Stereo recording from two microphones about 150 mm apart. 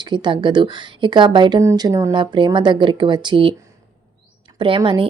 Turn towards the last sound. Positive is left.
turn(degrees=-30)  # may be behind; listen again after turning